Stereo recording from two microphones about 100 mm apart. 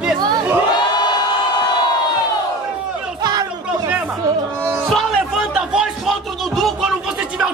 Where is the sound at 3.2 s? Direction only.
45° right (ahead or behind).